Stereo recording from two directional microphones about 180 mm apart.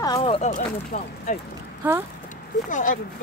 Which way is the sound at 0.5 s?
45° left (ahead or behind).